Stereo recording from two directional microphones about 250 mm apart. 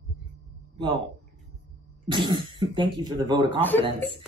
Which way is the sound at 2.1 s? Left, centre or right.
Centre.